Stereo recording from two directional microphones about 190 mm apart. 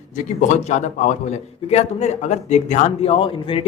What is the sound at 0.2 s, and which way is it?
A man's voice, 40° left (ahead or behind).